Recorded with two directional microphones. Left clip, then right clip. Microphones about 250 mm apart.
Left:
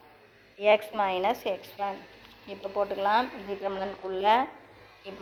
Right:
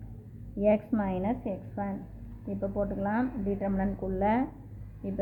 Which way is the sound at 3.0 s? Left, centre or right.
Centre.